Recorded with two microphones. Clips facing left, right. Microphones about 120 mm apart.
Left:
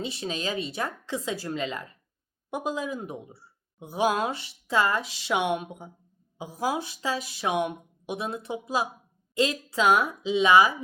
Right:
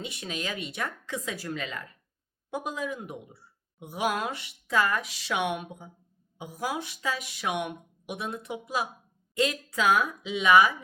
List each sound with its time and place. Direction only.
0.0 s a woman's voice: 30° left (ahead or behind)